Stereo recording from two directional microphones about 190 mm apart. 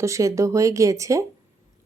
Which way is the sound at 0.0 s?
15° right (ahead or behind).